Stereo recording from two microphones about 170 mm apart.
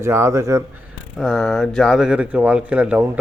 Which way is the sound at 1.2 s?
Centre (ahead or behind).